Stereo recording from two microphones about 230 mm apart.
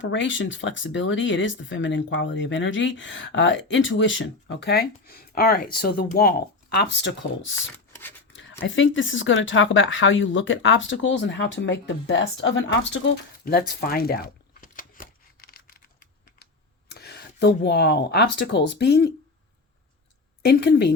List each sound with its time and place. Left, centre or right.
0.0 s speech: left
13.4 s a sound: left
16.9 s speech: left
20.5 s speech: left